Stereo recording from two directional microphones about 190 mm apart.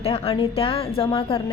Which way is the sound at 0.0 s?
30° left (ahead or behind).